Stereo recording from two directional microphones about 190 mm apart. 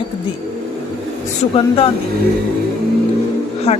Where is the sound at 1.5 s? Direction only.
30° left (ahead or behind).